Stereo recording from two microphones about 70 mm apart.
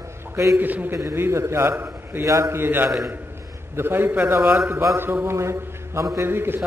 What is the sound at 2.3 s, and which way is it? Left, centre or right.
Speech, right.